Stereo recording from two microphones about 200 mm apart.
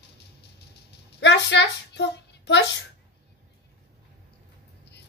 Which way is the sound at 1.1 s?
60° left (ahead or behind).